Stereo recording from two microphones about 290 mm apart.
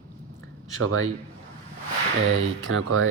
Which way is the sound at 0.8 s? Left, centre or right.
Right.